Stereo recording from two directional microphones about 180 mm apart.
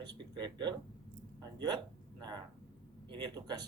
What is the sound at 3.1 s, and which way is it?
Speech, 20° right (ahead or behind).